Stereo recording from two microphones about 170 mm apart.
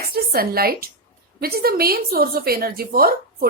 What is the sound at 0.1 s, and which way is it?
A woman's voice, 65° right (ahead or behind).